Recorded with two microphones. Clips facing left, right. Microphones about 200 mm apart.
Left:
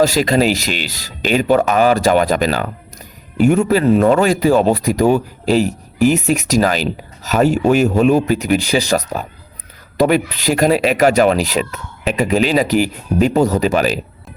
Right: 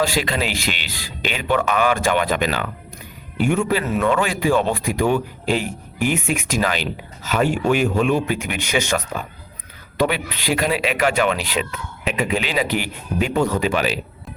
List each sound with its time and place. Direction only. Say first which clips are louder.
0.0 s a man's voice: left 8 dB; 40° left (ahead or behind)